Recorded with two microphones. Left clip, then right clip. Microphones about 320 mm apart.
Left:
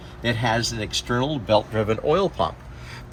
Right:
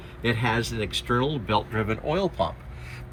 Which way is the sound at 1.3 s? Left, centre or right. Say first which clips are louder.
Left 5 dB; centre.